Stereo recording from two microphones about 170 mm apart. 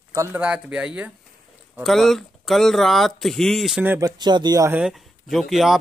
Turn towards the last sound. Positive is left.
turn(degrees=0)  # may be behind; listen again after turning